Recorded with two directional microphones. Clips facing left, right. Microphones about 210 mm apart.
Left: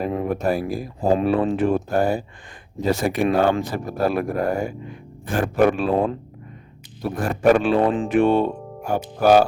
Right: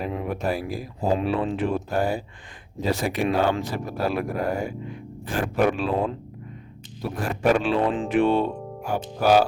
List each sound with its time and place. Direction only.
0.0 s speech: 45° left (ahead or behind)
7.3 s speech: 50° left (ahead or behind)